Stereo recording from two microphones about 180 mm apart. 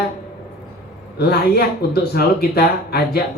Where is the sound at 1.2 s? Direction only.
60° left (ahead or behind).